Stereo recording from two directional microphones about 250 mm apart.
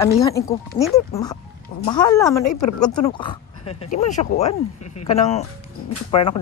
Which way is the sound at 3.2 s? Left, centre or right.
Left.